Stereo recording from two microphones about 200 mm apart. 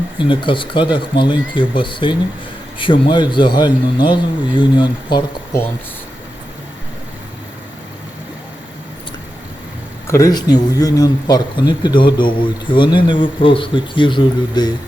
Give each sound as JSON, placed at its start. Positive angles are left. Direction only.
{"t": 0.2, "sound": "speech", "side_deg": 25}
{"t": 10.1, "sound": "speech", "side_deg": 15}